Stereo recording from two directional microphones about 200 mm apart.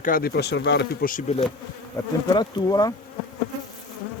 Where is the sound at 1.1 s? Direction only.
35° left (ahead or behind).